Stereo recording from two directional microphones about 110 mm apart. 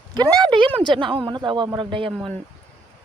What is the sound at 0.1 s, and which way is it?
A man's voice, 40° right (ahead or behind).